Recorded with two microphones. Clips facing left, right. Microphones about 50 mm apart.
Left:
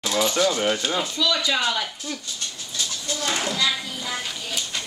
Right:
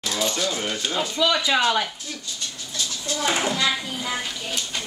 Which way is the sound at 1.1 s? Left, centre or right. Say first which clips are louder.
Right 6 dB; right.